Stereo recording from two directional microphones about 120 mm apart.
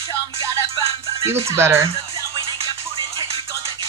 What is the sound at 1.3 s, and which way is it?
Speech, 20° right (ahead or behind).